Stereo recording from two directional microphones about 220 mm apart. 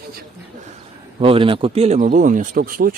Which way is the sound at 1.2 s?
25° right (ahead or behind).